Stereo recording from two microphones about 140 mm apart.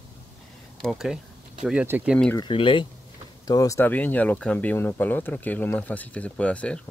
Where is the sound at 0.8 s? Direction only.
Centre (ahead or behind).